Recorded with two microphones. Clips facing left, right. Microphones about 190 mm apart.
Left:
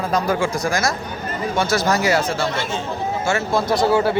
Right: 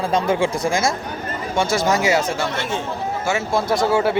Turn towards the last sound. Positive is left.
turn(degrees=-25)  # may be behind; listen again after turning